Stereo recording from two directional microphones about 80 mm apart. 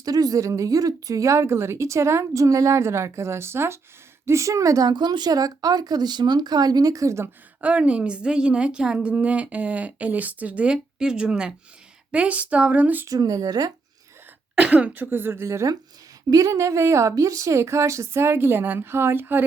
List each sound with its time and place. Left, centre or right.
0.0 s speech: right
7.6 s a woman's voice: centre
13.1 s speech: right
14.6 s speech: centre